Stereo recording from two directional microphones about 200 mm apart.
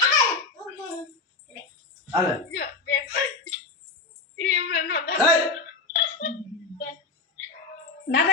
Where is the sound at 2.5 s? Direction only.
55° left (ahead or behind).